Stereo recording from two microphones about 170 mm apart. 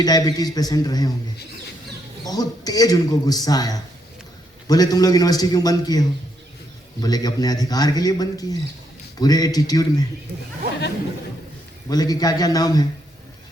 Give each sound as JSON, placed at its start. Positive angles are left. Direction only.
{"t": 0.0, "sound": "a man's voice", "side_deg": 25}
{"t": 2.2, "sound": "a man's voice", "side_deg": 20}
{"t": 11.9, "sound": "a man's voice", "side_deg": 20}